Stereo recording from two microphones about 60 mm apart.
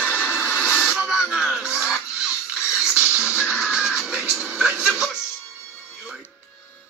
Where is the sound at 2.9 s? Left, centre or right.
Right.